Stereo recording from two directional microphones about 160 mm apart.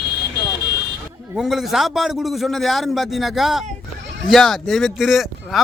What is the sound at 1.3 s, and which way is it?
Speech, centre (ahead or behind).